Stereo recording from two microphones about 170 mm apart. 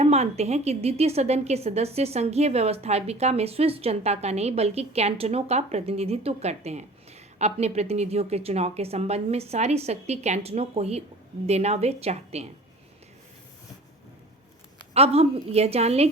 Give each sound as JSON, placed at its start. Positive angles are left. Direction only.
{"t": 0.0, "sound": "a woman's voice", "side_deg": -40}
{"t": 14.9, "sound": "a woman's voice", "side_deg": -35}